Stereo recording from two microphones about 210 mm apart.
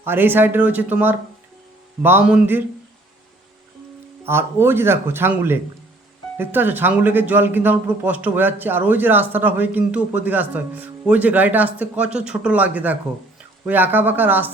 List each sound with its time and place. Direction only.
0.0 s speech: 10° right (ahead or behind)
4.2 s speech: 10° right (ahead or behind)